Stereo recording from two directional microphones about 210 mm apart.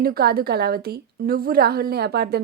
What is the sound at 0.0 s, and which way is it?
Speech, 45° right (ahead or behind).